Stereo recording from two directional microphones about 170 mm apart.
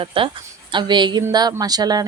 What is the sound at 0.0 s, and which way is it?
A woman's voice, 30° right (ahead or behind).